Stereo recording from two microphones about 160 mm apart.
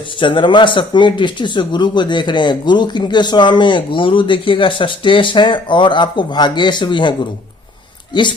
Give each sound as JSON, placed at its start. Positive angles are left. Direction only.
{"t": 0.2, "sound": "speech", "side_deg": 30}